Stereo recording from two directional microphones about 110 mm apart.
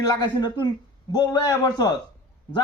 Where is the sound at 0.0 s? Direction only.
35° left (ahead or behind).